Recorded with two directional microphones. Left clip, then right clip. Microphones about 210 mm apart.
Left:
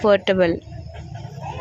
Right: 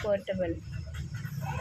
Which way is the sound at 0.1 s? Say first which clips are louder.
Left 12 dB; 40° left (ahead or behind).